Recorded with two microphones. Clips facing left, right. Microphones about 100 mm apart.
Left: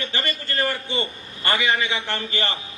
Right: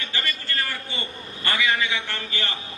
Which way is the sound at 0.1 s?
25° left (ahead or behind).